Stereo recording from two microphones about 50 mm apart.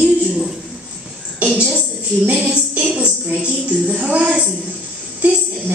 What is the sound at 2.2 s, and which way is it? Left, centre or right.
Speech, right.